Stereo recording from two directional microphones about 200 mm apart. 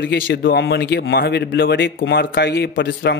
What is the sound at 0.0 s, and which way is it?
Speech, 60° left (ahead or behind).